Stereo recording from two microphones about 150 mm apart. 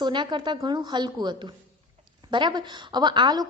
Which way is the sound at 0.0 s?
30° right (ahead or behind).